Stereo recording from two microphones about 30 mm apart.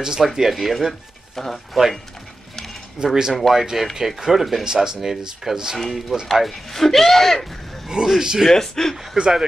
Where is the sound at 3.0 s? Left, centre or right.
Centre.